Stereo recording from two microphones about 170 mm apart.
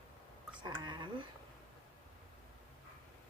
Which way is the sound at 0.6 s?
25° right (ahead or behind).